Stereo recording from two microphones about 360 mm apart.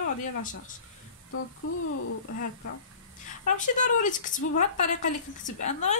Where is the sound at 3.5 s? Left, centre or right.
Left.